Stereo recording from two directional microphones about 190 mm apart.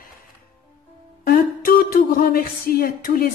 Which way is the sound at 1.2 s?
50° left (ahead or behind).